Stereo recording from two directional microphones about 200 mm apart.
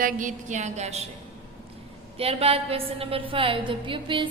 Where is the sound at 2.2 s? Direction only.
30° right (ahead or behind).